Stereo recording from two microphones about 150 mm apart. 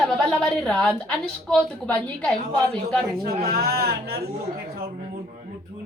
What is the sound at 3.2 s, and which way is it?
Speech, 90° right.